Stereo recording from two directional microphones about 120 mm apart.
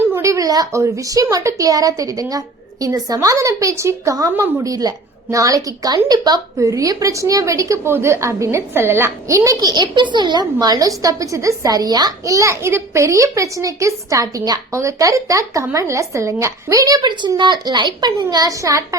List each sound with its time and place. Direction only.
0.0 s a woman's voice: 20° right (ahead or behind)